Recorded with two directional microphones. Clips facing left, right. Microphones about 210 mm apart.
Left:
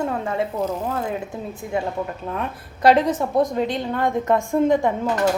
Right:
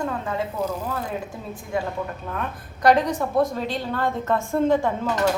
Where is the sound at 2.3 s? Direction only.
25° left (ahead or behind).